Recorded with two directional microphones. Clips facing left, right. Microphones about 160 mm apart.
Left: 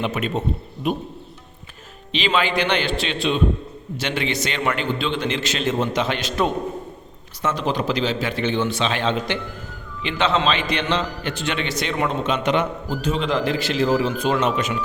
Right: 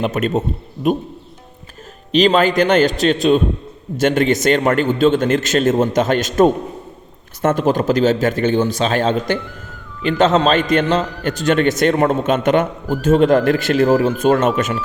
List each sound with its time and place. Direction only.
0.0 s a man's voice: 45° right (ahead or behind)
2.1 s a man's voice: 40° right (ahead or behind)